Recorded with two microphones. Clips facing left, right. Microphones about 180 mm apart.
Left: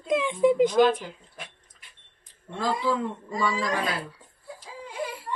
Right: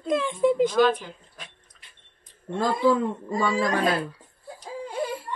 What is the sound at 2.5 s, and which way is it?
Speech, 50° right (ahead or behind).